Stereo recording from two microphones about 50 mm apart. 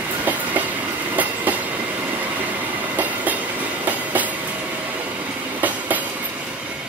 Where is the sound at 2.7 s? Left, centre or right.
Right.